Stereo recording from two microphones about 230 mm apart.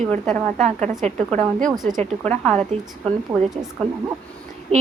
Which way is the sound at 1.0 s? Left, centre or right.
Right.